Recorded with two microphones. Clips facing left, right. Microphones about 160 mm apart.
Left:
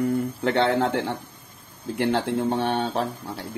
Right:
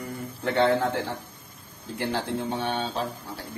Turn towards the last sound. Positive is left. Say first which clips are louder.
# left 4 dB
turn(degrees=65)  # may be behind; listen again after turning